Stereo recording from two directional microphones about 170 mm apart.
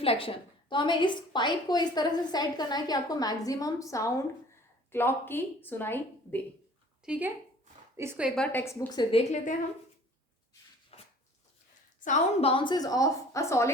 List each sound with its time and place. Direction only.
0.0 s a woman's voice: 35° left (ahead or behind); by 6.4 s 10° left (ahead or behind)
7.0 s a woman's voice: 5° right (ahead or behind)
8.4 s a woman's voice: 15° left (ahead or behind)
9.3 s a woman's voice: 50° left (ahead or behind)
10.9 s dog: 35° left (ahead or behind)
11.9 s a woman's voice: 45° left (ahead or behind); by 13.7 s 15° left (ahead or behind)